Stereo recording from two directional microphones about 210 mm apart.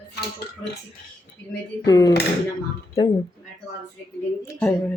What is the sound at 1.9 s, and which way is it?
Speech, 15° left (ahead or behind).